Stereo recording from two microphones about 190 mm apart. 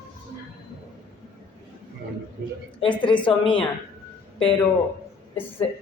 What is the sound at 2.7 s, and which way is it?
Speech, 25° left (ahead or behind).